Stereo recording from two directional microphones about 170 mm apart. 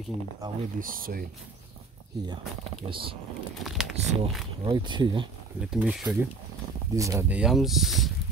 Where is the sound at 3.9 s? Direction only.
40° right (ahead or behind).